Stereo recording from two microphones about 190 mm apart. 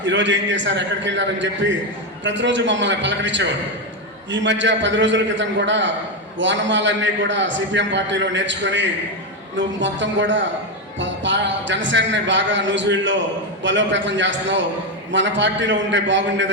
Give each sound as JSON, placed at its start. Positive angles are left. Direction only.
{"t": 0.0, "sound": "a man's voice", "side_deg": -70}